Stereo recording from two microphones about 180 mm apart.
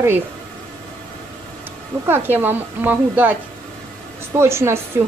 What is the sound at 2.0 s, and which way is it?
A woman's voice, 10° right (ahead or behind).